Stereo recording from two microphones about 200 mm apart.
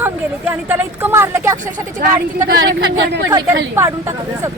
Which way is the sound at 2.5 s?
60° right (ahead or behind).